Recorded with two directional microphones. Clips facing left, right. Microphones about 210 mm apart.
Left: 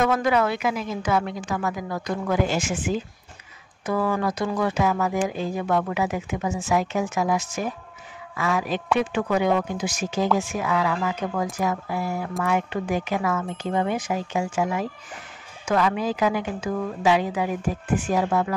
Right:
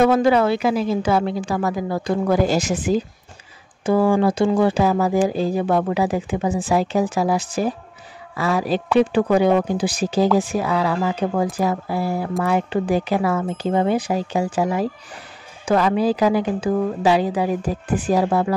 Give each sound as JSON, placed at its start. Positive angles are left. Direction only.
{"t": 0.0, "sound": "speech", "side_deg": -30}